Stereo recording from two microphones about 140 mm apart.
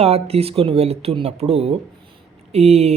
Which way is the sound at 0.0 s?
45° right (ahead or behind).